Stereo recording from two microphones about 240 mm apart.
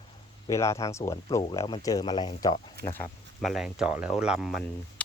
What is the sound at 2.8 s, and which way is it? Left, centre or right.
Speech, centre.